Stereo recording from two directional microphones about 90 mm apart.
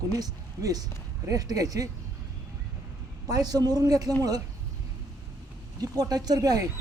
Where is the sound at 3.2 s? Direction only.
45° right (ahead or behind).